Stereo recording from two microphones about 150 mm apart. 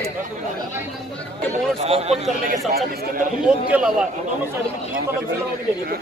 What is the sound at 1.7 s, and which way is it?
Speech, 40° right (ahead or behind).